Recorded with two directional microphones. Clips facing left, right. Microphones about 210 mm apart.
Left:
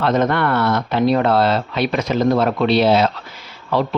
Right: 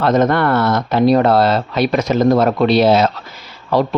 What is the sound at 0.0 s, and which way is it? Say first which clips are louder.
Speech: right 3 dB; 40° right (ahead or behind).